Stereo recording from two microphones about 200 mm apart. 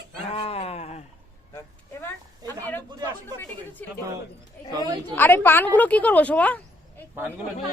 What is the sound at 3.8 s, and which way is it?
Speech, 5° left (ahead or behind).